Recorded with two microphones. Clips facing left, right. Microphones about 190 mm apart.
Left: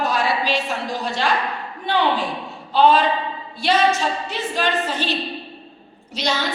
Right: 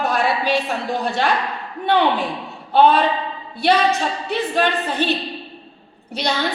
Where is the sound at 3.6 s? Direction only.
60° right (ahead or behind).